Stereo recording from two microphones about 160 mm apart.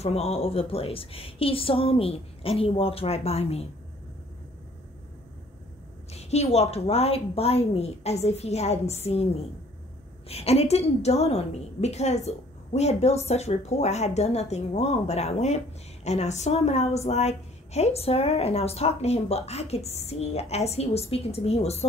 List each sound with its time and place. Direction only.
0.0 s a woman's voice: 40° left (ahead or behind)
6.1 s a woman's voice: 40° left (ahead or behind)